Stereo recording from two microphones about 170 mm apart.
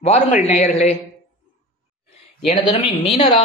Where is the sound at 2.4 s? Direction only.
35° left (ahead or behind).